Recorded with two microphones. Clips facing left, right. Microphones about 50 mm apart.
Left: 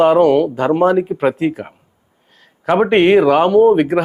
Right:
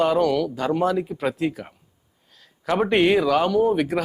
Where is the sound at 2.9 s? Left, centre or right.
Left.